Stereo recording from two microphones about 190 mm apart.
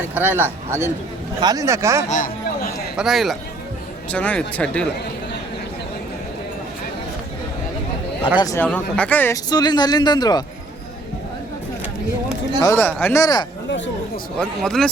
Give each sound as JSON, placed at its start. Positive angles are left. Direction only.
{"t": 0.1, "sound": "speech", "side_deg": -10}
{"t": 2.0, "sound": "speech", "side_deg": 40}
{"t": 2.9, "sound": "speech", "side_deg": 0}
{"t": 8.4, "sound": "speech", "side_deg": 15}
{"t": 12.6, "sound": "speech", "side_deg": 10}
{"t": 13.7, "sound": "speech", "side_deg": 70}
{"t": 14.3, "sound": "speech", "side_deg": 5}